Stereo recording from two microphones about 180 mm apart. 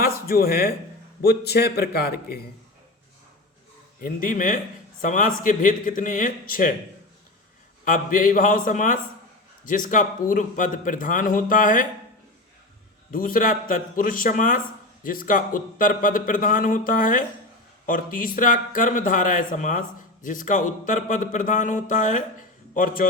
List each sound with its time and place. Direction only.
0.0 s a man's voice: 55° left (ahead or behind)
4.0 s a man's voice: 50° left (ahead or behind)
7.9 s a man's voice: 45° left (ahead or behind)
13.1 s a man's voice: 50° left (ahead or behind)